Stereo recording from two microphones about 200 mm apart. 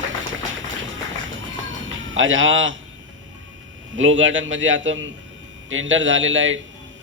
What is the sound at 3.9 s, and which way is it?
A man's voice, 75° right (ahead or behind).